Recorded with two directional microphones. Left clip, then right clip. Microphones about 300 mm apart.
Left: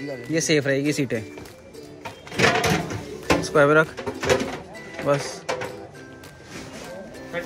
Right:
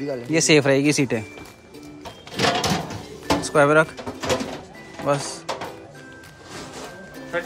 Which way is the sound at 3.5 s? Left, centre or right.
Centre.